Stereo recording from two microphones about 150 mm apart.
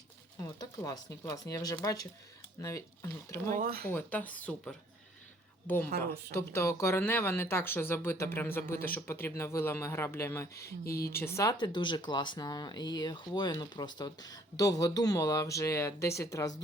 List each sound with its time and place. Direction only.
0.4 s speech: 25° left (ahead or behind)
3.5 s speech: 80° right
3.8 s speech: 10° left (ahead or behind)
10.8 s speech: 90° left
11.2 s speech: 20° left (ahead or behind)
11.5 s speech: 30° left (ahead or behind)